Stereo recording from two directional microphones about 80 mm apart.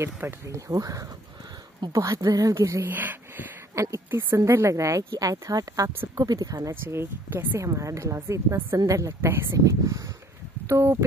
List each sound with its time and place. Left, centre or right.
0.0 s speech: right
2.8 s speech: right
3.7 s speech: right
5.2 s speech: right
6.7 s speech: right
9.2 s speech: right